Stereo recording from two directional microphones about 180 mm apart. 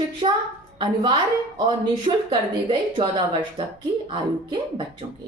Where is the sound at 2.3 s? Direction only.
25° right (ahead or behind).